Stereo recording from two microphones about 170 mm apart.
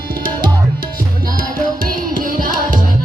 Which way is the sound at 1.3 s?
55° right (ahead or behind).